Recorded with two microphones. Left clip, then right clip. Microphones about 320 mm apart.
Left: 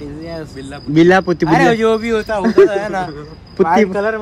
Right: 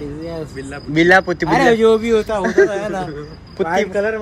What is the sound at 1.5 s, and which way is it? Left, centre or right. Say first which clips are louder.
Speech: even; centre.